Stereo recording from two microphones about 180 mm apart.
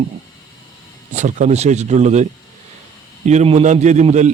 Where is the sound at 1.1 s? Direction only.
40° right (ahead or behind).